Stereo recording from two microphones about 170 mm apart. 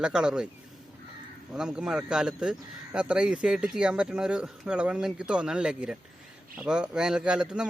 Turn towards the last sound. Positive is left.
turn(degrees=-5)  # may be behind; listen again after turning